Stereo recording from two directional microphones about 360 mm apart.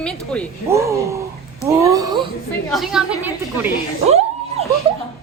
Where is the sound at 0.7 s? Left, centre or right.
Centre.